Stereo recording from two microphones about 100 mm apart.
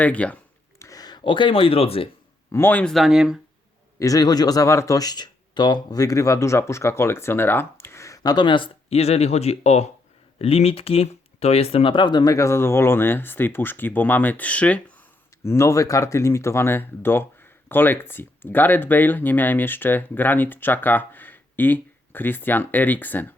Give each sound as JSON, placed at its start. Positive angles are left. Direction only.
{"t": 0.0, "sound": "speech", "side_deg": 15}
{"t": 0.8, "sound": "speech", "side_deg": 35}
{"t": 2.5, "sound": "speech", "side_deg": 20}
{"t": 2.8, "sound": "speech", "side_deg": 0}
{"t": 4.0, "sound": "speech", "side_deg": 35}
{"t": 10.3, "sound": "speech", "side_deg": 80}
{"t": 15.4, "sound": "speech", "side_deg": 30}